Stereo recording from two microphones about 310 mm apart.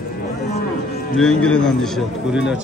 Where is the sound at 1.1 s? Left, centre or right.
Centre.